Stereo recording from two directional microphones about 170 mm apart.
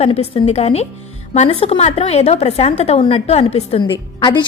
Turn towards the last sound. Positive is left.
turn(degrees=25)  # may be behind; listen again after turning